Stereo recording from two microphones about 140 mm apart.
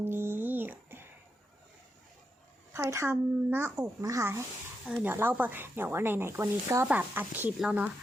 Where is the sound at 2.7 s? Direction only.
20° right (ahead or behind).